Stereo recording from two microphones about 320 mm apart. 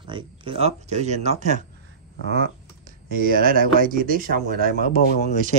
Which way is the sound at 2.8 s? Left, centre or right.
Right.